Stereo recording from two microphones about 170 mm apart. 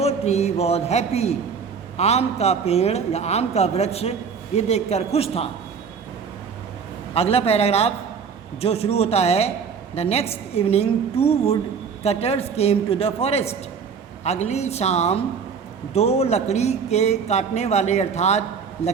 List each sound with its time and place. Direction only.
0.0 s a man's voice: 40° left (ahead or behind)
7.1 s a man's voice: 35° left (ahead or behind)